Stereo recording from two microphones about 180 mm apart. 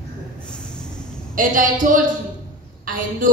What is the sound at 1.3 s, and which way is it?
A woman's voice, 50° right (ahead or behind).